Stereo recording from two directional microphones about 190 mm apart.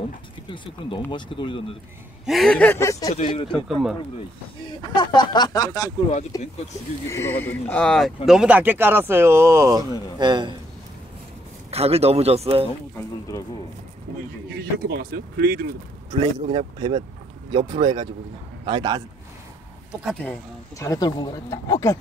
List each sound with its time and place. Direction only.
0.5 s speech: 25° left (ahead or behind)
2.2 s speech: centre (ahead or behind); by 3.2 s 20° left (ahead or behind)
3.2 s speech: 30° left (ahead or behind)
3.5 s speech: centre (ahead or behind)
4.8 s speech: 25° left (ahead or behind); by 10.5 s 25° right (ahead or behind)
11.7 s speech: 35° right (ahead or behind)
14.6 s speech: 55° right (ahead or behind)
16.2 s speech: 35° right (ahead or behind)
17.5 s speech: 25° right (ahead or behind)
20.2 s speech: 15° left (ahead or behind)